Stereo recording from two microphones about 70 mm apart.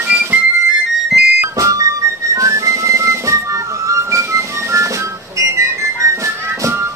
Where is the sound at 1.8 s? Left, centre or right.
Right.